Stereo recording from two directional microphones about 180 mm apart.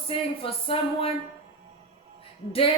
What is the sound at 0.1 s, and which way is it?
Speech, 30° left (ahead or behind).